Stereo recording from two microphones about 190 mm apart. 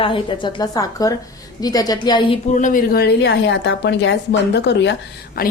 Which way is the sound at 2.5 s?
45° left (ahead or behind).